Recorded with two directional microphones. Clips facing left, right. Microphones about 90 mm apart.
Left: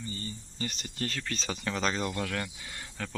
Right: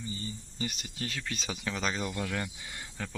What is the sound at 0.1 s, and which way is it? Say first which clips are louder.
Speech: even; 15° right (ahead or behind).